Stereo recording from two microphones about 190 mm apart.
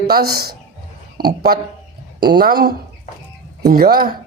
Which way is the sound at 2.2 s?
55° right (ahead or behind).